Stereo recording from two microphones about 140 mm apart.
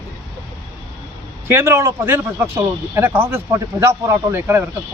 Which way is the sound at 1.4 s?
20° right (ahead or behind).